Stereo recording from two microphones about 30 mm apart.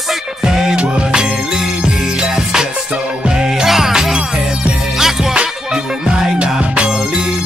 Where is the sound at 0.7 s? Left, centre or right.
Right.